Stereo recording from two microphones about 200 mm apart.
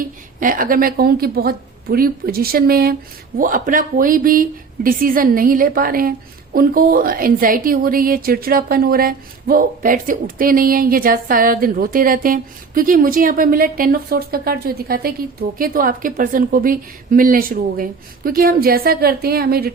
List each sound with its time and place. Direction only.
0.3 s speech: 45° right (ahead or behind)